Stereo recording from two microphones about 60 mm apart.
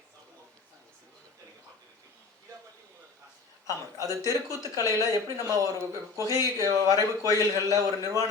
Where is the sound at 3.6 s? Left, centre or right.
Right.